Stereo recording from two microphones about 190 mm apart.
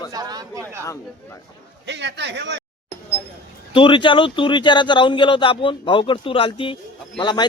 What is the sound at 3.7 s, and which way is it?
Speech, 25° left (ahead or behind).